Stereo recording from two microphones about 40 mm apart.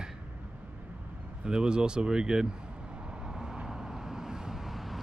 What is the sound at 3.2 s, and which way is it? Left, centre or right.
Vehicle, centre.